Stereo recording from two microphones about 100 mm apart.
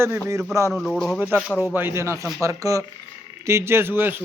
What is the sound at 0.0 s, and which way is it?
Speech, 25° right (ahead or behind).